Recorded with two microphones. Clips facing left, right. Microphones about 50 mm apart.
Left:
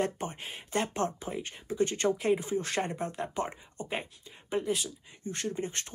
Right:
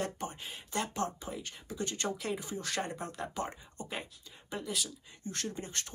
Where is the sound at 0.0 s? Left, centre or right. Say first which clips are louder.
Left 5 dB; left.